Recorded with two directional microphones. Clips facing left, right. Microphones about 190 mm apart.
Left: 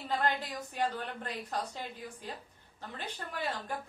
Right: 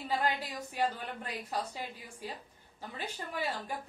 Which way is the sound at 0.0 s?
10° right (ahead or behind).